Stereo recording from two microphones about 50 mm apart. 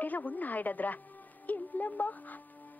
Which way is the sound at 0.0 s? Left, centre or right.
Left.